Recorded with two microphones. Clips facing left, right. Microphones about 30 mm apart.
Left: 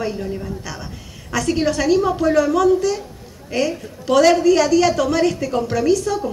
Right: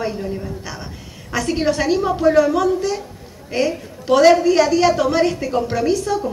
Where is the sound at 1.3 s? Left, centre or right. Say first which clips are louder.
Even; right.